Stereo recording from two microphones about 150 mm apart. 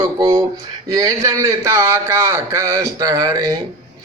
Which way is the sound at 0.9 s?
20° right (ahead or behind).